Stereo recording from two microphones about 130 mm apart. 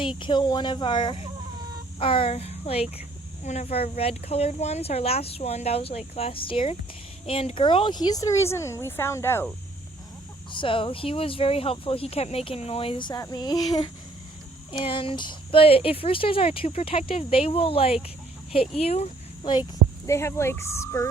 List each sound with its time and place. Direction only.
0.0 s speech: 40° left (ahead or behind); by 9.5 s 20° left (ahead or behind)
10.5 s speech: 40° left (ahead or behind)
14.7 s speech: 40° left (ahead or behind)
20.1 s speech: 20° left (ahead or behind)